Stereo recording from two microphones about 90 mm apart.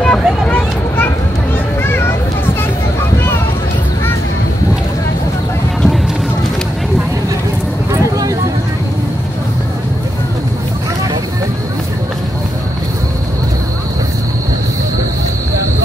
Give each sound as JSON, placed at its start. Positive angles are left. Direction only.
{"t": 0.0, "sound": "vehicle", "side_deg": 10}
{"t": 1.8, "sound": "children playing", "side_deg": 25}
{"t": 7.9, "sound": "vehicle", "side_deg": -35}